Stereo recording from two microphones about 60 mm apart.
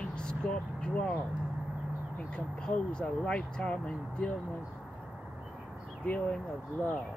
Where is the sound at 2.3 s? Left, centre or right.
Centre.